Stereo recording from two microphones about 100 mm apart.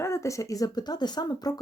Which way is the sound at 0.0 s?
30° left (ahead or behind).